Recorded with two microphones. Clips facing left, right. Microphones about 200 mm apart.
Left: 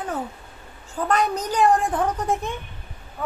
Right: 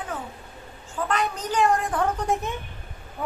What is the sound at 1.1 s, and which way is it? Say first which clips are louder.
Speech: left 5 dB; 40° left (ahead or behind).